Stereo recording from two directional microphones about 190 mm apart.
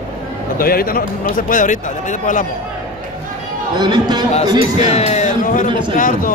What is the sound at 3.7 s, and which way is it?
Speech, 20° right (ahead or behind).